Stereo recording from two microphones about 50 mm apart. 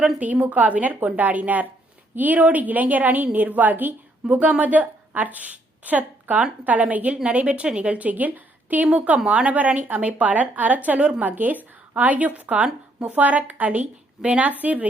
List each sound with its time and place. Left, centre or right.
0.2 s a woman's voice: right